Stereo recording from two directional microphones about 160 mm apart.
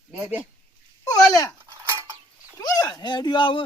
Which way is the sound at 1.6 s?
15° right (ahead or behind).